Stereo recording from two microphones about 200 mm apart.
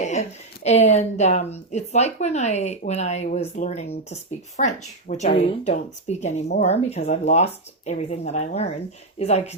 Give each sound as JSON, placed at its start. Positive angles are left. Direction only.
{"t": 0.0, "sound": "speech", "side_deg": 35}